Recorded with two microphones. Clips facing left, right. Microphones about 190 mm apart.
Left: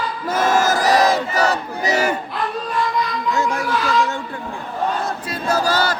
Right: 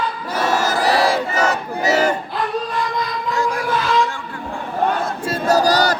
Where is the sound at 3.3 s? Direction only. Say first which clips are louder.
Right 1 dB; 25° left (ahead or behind).